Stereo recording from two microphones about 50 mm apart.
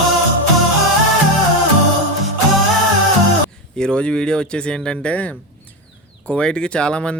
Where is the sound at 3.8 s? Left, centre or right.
Centre.